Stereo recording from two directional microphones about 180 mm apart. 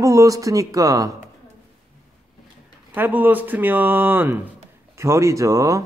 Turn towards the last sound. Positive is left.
turn(degrees=-15)  # may be behind; listen again after turning